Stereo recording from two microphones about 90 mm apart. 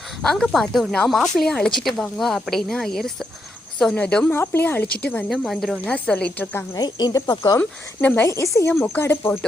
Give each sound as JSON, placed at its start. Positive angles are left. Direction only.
{"t": 0.2, "sound": "speech", "side_deg": 5}
{"t": 3.9, "sound": "speech", "side_deg": 15}
{"t": 5.5, "sound": "speech", "side_deg": 0}
{"t": 5.7, "sound": "a woman's voice", "side_deg": 15}
{"t": 6.7, "sound": "speech", "side_deg": 45}
{"t": 7.6, "sound": "a woman's voice", "side_deg": 15}
{"t": 8.2, "sound": "a woman's voice", "side_deg": 35}